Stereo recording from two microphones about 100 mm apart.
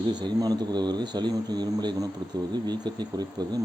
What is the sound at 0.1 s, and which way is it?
Speech, 45° right (ahead or behind).